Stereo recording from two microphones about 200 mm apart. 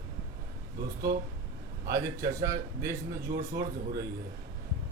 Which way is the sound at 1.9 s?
15° right (ahead or behind).